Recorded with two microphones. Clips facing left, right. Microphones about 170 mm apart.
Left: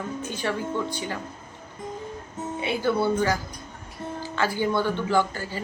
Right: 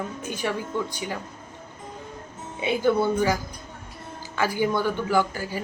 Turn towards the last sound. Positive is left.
turn(degrees=-10)  # may be behind; listen again after turning